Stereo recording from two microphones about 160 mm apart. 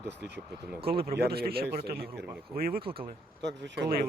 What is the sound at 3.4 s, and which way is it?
Speech, 90° right.